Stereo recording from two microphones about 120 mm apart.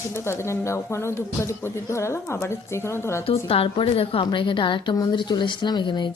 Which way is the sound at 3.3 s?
50° left (ahead or behind).